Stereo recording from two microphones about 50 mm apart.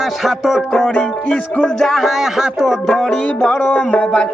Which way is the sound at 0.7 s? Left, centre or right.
Centre.